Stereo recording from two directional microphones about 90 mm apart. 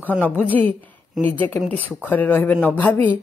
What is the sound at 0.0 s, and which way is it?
Speech, 20° left (ahead or behind).